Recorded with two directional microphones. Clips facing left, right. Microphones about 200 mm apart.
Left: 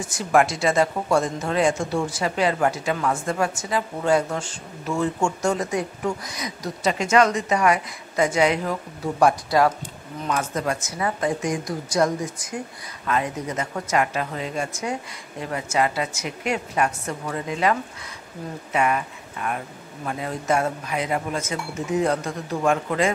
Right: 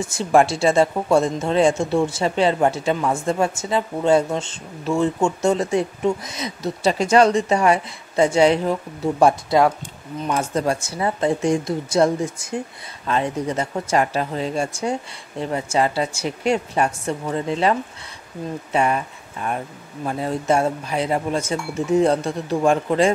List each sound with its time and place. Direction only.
0.0 s speech: 25° right (ahead or behind)